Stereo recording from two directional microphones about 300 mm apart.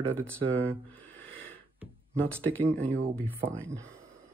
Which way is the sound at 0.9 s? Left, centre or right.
Centre.